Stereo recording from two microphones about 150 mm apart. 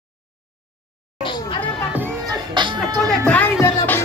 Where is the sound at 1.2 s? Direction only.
30° left (ahead or behind).